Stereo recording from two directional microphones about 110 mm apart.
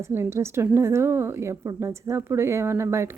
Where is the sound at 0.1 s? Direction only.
25° right (ahead or behind).